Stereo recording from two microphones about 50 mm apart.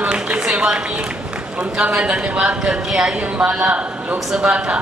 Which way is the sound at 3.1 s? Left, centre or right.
Right.